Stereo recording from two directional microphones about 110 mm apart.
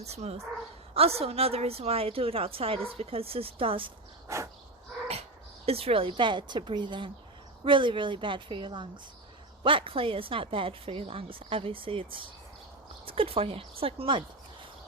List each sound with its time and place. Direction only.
0.0 s a woman's voice: 75° right (ahead or behind); by 3.9 s 55° right (ahead or behind)
4.3 s a sound: 25° right (ahead or behind)
5.6 s a woman's voice: 60° right (ahead or behind)